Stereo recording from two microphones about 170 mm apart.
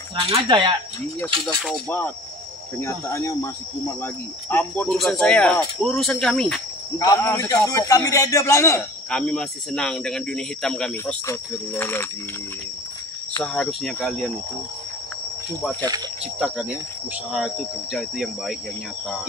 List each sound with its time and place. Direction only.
0.1 s speech: 30° right (ahead or behind)
1.2 s cricket: 5° left (ahead or behind)
2.8 s speech: 15° left (ahead or behind)
4.9 s cricket: centre (ahead or behind)
7.2 s speech: 15° left (ahead or behind)
9.1 s cricket: 5° left (ahead or behind)
11.2 s speech: 10° left (ahead or behind)
13.4 s cricket: 5° left (ahead or behind)
16.3 s cricket: 5° right (ahead or behind)